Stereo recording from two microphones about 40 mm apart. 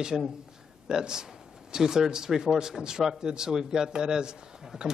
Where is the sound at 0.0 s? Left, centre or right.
Centre.